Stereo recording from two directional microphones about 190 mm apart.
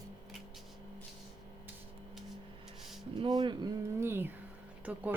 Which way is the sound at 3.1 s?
25° right (ahead or behind).